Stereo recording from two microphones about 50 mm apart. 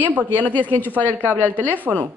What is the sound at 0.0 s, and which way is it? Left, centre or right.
Speech, right.